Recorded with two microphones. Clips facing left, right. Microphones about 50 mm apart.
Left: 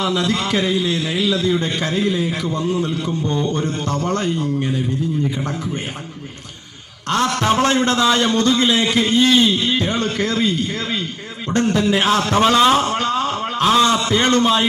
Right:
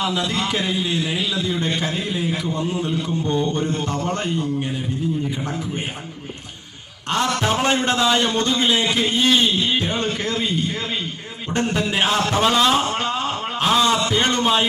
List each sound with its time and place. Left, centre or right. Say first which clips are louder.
0.0 s a man's voice: left 3 dB; centre
7.1 s a man's voice: left 3 dB; centre
13.0 s a sound: left 3 dB; centre
13.8 s a man's voice: left 2 dB; centre